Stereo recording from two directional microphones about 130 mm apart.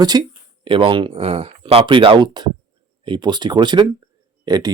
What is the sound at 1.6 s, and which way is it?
Speech, 40° right (ahead or behind).